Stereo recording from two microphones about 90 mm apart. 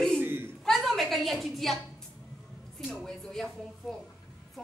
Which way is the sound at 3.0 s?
5° left (ahead or behind).